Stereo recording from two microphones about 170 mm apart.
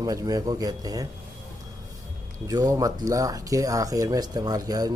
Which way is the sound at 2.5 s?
20° right (ahead or behind).